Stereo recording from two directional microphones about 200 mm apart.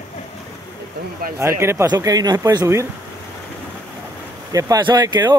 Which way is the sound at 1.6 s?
15° right (ahead or behind).